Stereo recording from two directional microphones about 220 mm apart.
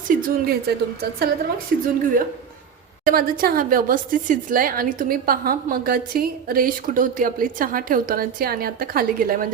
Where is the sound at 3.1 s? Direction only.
40° right (ahead or behind).